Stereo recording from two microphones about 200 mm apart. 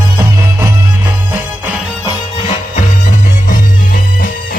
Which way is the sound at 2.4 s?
35° left (ahead or behind).